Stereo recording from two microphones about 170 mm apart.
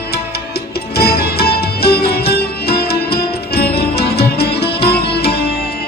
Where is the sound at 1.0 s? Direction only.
65° left (ahead or behind).